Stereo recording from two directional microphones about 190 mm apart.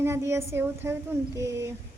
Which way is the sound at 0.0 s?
15° right (ahead or behind).